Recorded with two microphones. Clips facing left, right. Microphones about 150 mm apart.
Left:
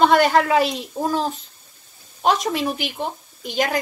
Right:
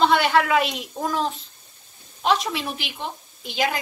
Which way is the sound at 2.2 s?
45° left (ahead or behind).